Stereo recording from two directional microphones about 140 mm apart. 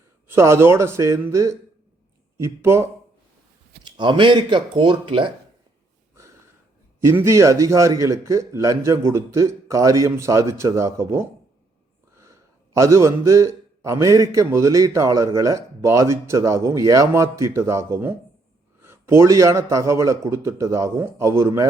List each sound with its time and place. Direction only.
0.3 s a man's voice: 20° right (ahead or behind)
3.8 s speech: 35° right (ahead or behind)
7.0 s a man's voice: 20° right (ahead or behind)